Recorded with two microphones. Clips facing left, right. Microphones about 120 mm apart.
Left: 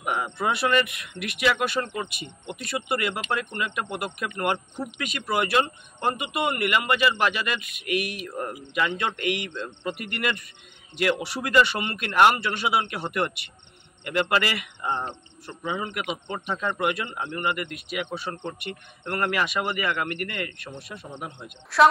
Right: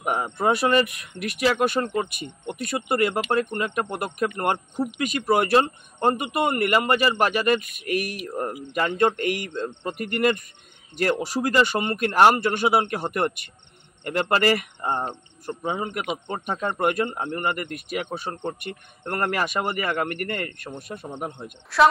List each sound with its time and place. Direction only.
0.0 s speech: 40° right (ahead or behind)
21.7 s a woman's voice: centre (ahead or behind)